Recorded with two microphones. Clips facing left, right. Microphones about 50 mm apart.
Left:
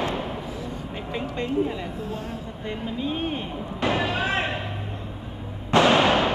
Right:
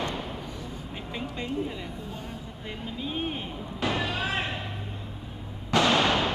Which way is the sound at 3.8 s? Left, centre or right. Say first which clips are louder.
Left 5 dB; centre.